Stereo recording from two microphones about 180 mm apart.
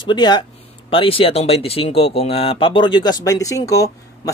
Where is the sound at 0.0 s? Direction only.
25° left (ahead or behind).